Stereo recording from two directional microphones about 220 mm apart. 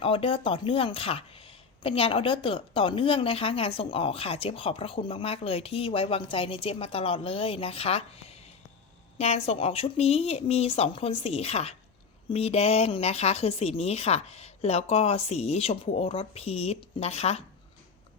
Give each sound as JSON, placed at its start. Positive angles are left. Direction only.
{"t": 0.0, "sound": "speech", "side_deg": 25}